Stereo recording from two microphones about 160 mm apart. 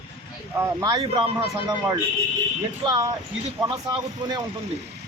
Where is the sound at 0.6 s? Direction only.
25° right (ahead or behind).